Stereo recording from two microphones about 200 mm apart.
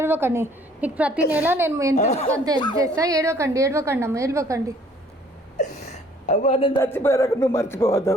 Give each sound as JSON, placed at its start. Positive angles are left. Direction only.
{"t": 0.0, "sound": "a woman's voice", "side_deg": -10}
{"t": 2.0, "sound": "speech", "side_deg": 30}
{"t": 2.7, "sound": "a woman's voice", "side_deg": -15}
{"t": 5.5, "sound": "speech", "side_deg": 35}
{"t": 6.8, "sound": "speech", "side_deg": 10}